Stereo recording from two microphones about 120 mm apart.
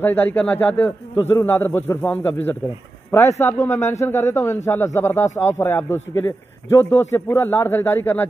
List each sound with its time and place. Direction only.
0.0 s a man's voice: 15° left (ahead or behind)